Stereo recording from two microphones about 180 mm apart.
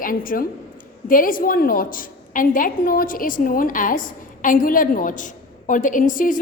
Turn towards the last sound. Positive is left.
turn(degrees=45)  # may be behind; listen again after turning